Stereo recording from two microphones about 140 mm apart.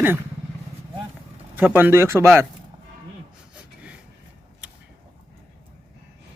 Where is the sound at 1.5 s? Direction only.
15° right (ahead or behind).